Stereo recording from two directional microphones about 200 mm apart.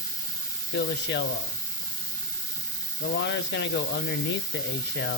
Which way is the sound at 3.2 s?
60° left (ahead or behind).